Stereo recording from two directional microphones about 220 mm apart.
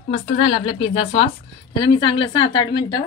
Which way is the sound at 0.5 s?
25° left (ahead or behind).